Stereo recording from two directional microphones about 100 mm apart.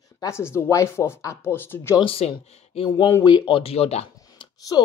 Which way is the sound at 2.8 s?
50° left (ahead or behind).